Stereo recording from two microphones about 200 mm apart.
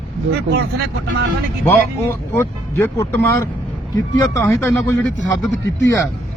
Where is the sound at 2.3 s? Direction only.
15° left (ahead or behind).